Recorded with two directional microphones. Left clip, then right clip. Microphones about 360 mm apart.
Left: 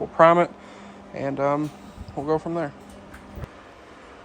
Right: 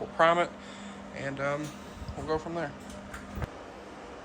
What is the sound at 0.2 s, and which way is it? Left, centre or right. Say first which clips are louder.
Speech: left 8 dB; centre.